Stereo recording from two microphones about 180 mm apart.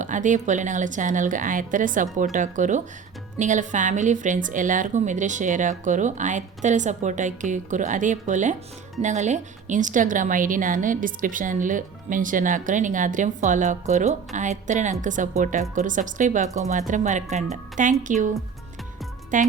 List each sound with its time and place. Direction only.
0.0 s speech: 45° right (ahead or behind)